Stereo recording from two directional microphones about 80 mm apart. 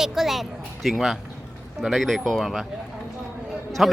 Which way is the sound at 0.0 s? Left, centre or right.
Centre.